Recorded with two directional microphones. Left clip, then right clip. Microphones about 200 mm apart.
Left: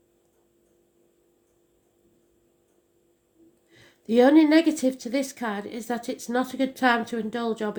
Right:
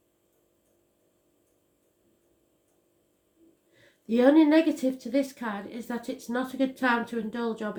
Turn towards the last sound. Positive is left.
turn(degrees=45)  # may be behind; listen again after turning